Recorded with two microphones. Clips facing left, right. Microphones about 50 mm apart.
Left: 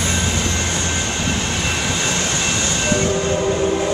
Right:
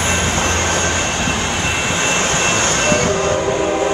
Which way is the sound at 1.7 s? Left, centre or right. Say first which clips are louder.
Right 4 dB; right.